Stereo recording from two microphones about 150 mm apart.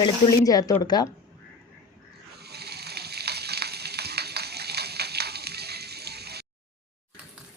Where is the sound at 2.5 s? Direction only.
90° right.